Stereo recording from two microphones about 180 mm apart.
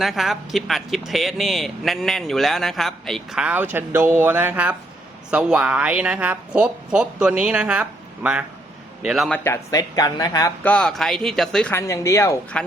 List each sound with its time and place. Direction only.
0.0 s a man's voice: centre (ahead or behind)
9.4 s speech: 15° left (ahead or behind)
10.6 s speech: 5° left (ahead or behind)